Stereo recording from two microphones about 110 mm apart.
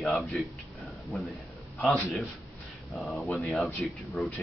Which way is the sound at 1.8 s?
15° left (ahead or behind).